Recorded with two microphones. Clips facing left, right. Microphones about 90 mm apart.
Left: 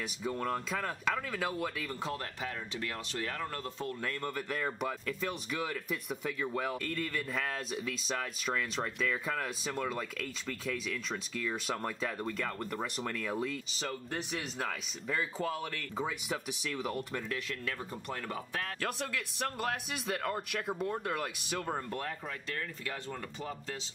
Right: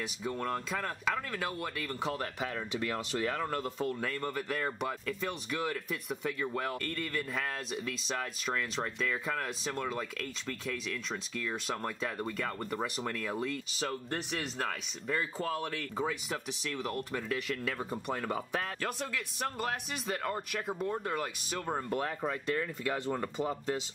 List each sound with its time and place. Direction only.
0.0 s speech: centre (ahead or behind)
3.3 s speech: 5° right (ahead or behind)
17.6 s speech: 10° right (ahead or behind)
18.8 s speech: centre (ahead or behind)
23.1 s speech: 25° right (ahead or behind)